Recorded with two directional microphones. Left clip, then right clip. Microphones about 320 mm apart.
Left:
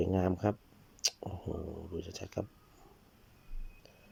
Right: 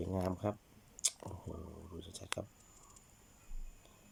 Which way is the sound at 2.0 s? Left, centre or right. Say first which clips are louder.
Left 8 dB; centre.